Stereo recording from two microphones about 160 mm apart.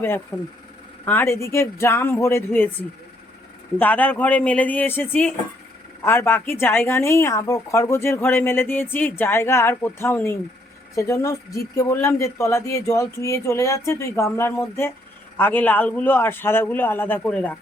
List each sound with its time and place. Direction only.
0.3 s speech: centre (ahead or behind)
1.0 s a woman's voice: 15° left (ahead or behind)
3.8 s a woman's voice: 10° left (ahead or behind)